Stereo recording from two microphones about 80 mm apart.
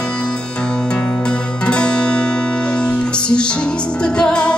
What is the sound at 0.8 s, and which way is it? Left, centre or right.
Music, centre.